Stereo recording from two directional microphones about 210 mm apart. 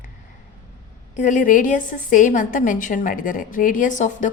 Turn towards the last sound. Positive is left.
turn(degrees=35)  # may be behind; listen again after turning